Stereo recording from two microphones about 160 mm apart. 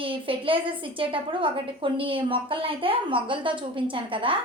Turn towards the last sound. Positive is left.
turn(degrees=-35)  # may be behind; listen again after turning